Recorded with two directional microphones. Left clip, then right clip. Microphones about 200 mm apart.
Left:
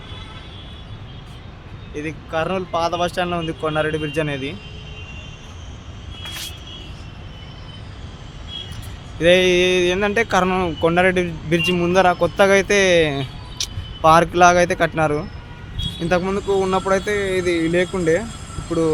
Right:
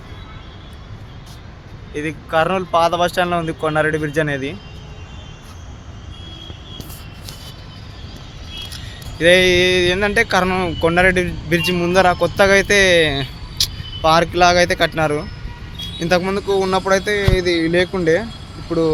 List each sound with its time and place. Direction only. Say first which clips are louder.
1.9 s speech: right 5 dB; 20° right (ahead or behind); by 4.5 s 5° right (ahead or behind)
9.1 s speech: right 2 dB; centre (ahead or behind)